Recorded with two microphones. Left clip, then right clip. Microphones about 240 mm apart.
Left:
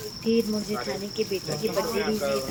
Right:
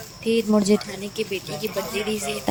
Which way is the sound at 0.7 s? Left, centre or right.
Right.